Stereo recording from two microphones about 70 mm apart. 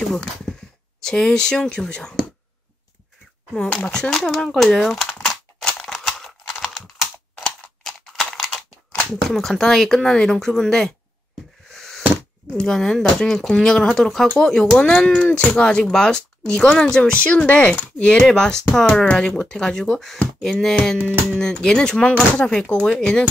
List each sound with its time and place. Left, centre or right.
0.1 s speech: centre
3.8 s speech: centre
5.2 s scissors: centre
6.4 s computer keyboard: centre
7.6 s a sound: centre
9.3 s speech: centre
11.7 s a sound: centre
12.5 s speech: centre
21.0 s music: right
21.4 s speech: centre